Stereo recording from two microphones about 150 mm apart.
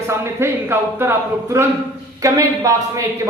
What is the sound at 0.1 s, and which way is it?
A man's voice, 15° right (ahead or behind).